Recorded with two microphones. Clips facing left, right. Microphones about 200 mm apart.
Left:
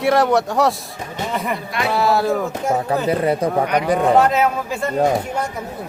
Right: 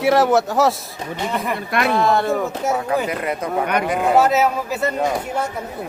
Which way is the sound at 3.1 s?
30° left (ahead or behind).